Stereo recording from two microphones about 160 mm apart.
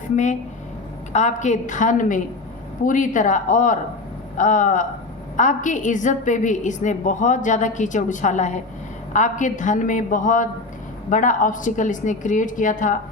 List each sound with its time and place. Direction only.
1.1 s a woman's voice: 50° left (ahead or behind)